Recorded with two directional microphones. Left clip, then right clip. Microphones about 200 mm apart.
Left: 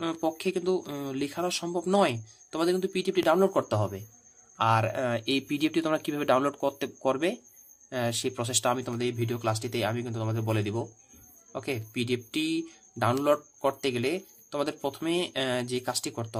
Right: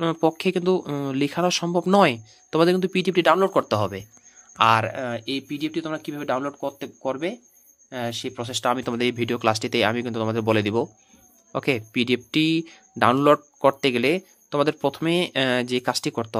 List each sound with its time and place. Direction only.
0.0 s speech: 35° right (ahead or behind)
3.6 s speech: 15° right (ahead or behind)
8.7 s speech: 30° right (ahead or behind)